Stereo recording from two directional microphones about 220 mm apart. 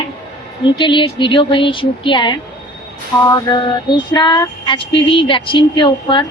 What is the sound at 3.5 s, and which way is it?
A woman's voice, 20° left (ahead or behind).